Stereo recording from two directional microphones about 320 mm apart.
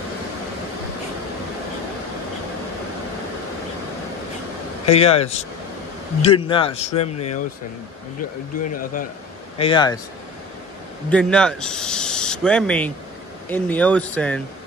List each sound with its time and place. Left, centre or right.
4.8 s a man's voice: centre
9.6 s a man's voice: centre
11.1 s speech: centre